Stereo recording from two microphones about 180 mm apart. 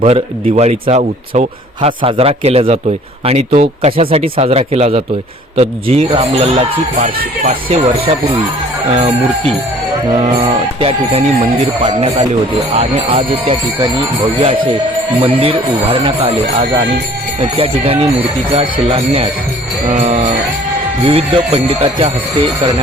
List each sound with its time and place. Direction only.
0.0 s a man's voice: 35° right (ahead or behind)
10.1 s a man's voice: 30° right (ahead or behind)
19.9 s music: 35° right (ahead or behind)
21.0 s a man's voice: 30° right (ahead or behind)